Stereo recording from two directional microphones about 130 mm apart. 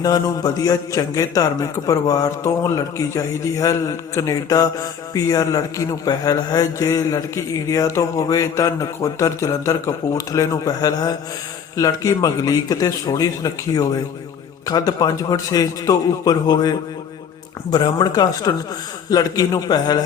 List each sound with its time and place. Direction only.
0.0 s a man's voice: 30° left (ahead or behind)